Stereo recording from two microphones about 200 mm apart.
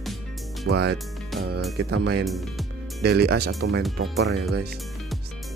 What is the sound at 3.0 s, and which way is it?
Speech, 55° right (ahead or behind).